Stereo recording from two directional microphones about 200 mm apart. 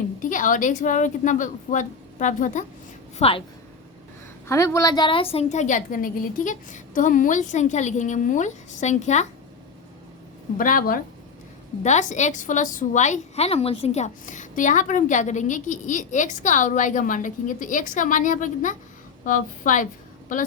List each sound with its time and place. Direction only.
0.2 s a woman's voice: 40° left (ahead or behind)
4.4 s a woman's voice: 15° left (ahead or behind); by 9.2 s 35° left (ahead or behind)
10.6 s a woman's voice: 45° left (ahead or behind)